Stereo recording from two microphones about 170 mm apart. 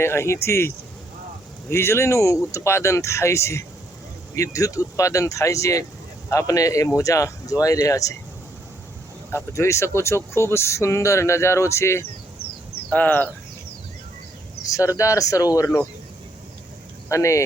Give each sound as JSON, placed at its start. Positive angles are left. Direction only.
{"t": 0.0, "sound": "speech", "side_deg": 15}
{"t": 1.7, "sound": "speech", "side_deg": 15}
{"t": 9.3, "sound": "speech", "side_deg": 15}
{"t": 14.7, "sound": "speech", "side_deg": 20}
{"t": 17.1, "sound": "speech", "side_deg": 15}